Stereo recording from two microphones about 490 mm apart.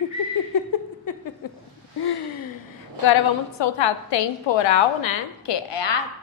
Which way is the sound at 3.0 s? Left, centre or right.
Left.